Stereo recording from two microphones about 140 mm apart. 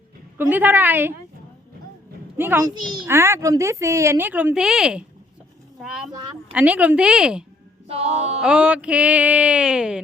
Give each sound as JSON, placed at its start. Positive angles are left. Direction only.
{"t": 0.3, "sound": "music", "side_deg": -15}
{"t": 2.4, "sound": "music", "side_deg": -15}
{"t": 3.1, "sound": "a woman's voice", "side_deg": -20}
{"t": 6.5, "sound": "music", "side_deg": -10}
{"t": 7.9, "sound": "a sound", "side_deg": -45}
{"t": 8.4, "sound": "music", "side_deg": -5}